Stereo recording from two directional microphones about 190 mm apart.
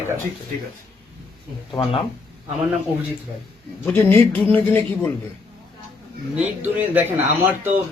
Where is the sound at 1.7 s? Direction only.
30° left (ahead or behind).